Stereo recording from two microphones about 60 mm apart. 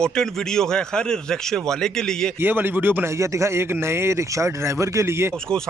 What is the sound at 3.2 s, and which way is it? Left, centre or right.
Speech, right.